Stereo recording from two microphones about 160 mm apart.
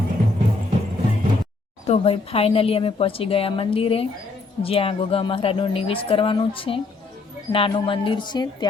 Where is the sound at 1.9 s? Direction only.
40° left (ahead or behind).